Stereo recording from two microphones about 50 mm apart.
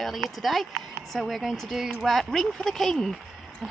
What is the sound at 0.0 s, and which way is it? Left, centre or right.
Speech, centre.